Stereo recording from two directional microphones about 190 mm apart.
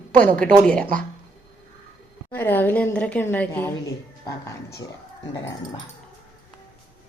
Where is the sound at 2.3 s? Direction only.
10° left (ahead or behind).